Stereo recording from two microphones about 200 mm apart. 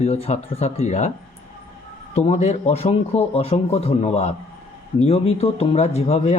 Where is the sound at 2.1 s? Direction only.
35° left (ahead or behind).